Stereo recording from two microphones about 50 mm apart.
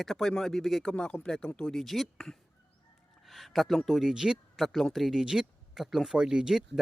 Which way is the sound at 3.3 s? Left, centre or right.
Centre.